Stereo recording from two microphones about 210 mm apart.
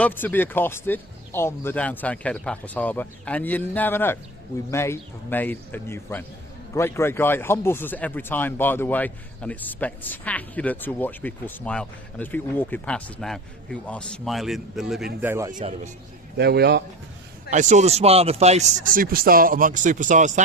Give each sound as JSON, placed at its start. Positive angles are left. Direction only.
{"t": 0.0, "sound": "speech", "side_deg": 10}
{"t": 15.2, "sound": "a man's voice", "side_deg": -10}
{"t": 16.4, "sound": "a man's voice", "side_deg": -50}
{"t": 17.5, "sound": "speech", "side_deg": -35}